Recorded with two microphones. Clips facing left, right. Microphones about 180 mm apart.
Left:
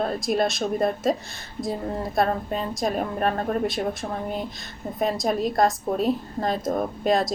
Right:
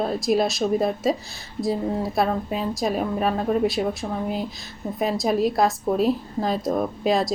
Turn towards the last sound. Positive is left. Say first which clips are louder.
# right 1 dB
turn(degrees=0)  # may be behind; listen again after turning